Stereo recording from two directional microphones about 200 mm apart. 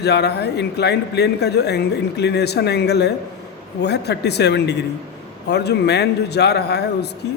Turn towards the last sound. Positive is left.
turn(degrees=55)  # may be behind; listen again after turning